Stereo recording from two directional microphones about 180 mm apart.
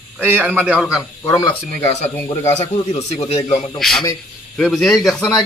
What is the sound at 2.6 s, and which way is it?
Speech, 35° left (ahead or behind).